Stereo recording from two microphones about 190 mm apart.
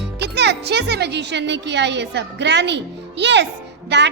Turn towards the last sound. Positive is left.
turn(degrees=-65)  # may be behind; listen again after turning